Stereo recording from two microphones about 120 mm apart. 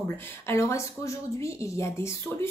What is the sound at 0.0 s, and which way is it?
Speech, 20° left (ahead or behind).